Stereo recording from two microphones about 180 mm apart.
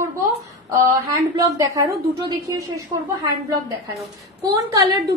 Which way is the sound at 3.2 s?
20° right (ahead or behind).